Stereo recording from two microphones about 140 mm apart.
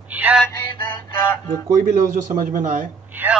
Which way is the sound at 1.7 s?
70° right (ahead or behind).